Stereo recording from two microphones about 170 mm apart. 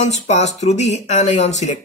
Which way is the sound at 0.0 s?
40° left (ahead or behind).